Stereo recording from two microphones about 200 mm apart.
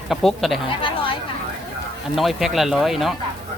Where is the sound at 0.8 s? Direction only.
25° left (ahead or behind).